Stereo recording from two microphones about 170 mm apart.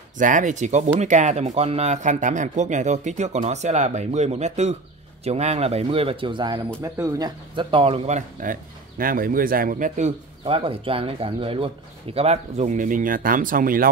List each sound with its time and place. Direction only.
0.2 s speech: 50° right (ahead or behind); by 8.2 s 35° right (ahead or behind)
8.4 s speech: 55° right (ahead or behind)